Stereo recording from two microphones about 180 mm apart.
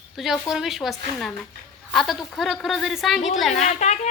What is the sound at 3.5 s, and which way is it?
Speech, 40° left (ahead or behind).